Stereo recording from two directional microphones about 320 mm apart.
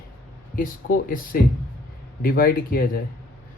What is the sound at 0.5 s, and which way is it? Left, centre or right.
A man's voice, left.